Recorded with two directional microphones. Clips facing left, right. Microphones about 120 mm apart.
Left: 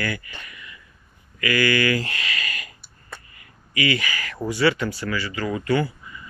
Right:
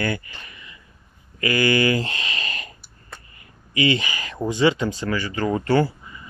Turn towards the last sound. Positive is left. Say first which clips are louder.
# right 3 dB
turn(degrees=-35)  # may be behind; listen again after turning